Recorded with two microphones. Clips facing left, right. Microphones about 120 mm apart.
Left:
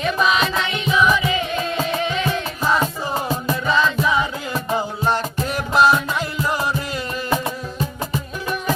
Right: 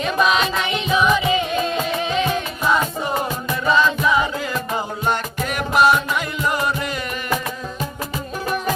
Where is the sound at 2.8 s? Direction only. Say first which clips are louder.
Right 1 dB; 30° left (ahead or behind).